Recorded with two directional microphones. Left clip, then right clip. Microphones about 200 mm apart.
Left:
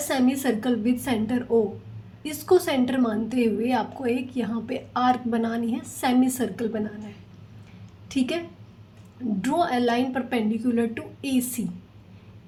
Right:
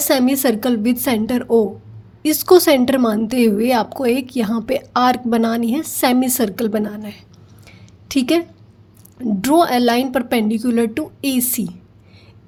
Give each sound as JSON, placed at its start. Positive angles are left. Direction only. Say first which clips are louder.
{"t": 0.0, "sound": "a woman's voice", "louder": "right 8 dB", "side_deg": -45}
{"t": 9.4, "sound": "speech", "louder": "right 9 dB", "side_deg": -50}